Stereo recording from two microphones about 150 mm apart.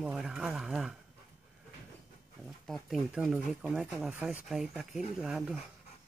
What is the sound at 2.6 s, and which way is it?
Speech, centre (ahead or behind).